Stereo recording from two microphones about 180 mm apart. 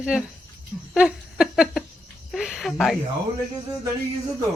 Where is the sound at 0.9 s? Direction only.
Centre (ahead or behind).